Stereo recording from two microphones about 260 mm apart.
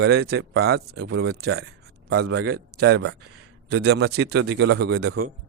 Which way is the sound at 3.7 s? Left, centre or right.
Right.